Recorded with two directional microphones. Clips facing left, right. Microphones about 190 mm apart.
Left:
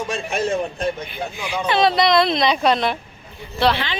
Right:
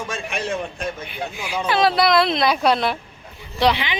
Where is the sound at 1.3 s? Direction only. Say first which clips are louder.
Left 1 dB; 5° right (ahead or behind).